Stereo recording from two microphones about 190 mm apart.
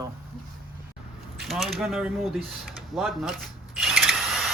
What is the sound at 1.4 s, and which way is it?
Speech, centre (ahead or behind).